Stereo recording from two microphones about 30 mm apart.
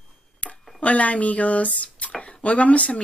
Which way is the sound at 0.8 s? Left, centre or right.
Left.